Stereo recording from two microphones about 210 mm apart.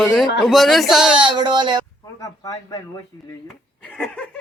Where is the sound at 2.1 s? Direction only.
15° left (ahead or behind).